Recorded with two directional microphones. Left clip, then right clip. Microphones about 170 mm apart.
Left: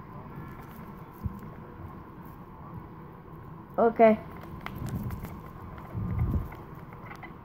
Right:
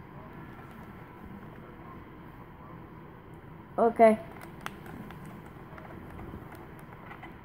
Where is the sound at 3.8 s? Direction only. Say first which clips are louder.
Left 1 dB; 45° right (ahead or behind).